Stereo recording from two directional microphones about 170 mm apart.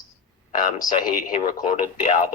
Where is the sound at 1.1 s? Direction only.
55° left (ahead or behind).